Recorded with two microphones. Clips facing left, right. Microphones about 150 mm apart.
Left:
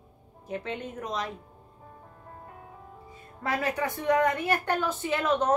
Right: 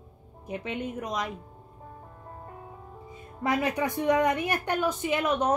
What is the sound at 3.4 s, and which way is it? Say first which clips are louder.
A woman's voice: right 2 dB; 20° right (ahead or behind).